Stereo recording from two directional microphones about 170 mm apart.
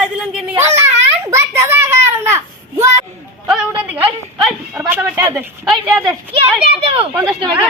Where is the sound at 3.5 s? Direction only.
5° right (ahead or behind).